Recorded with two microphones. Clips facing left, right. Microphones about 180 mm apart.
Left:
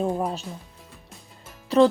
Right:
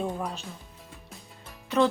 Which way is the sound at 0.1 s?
45° left (ahead or behind).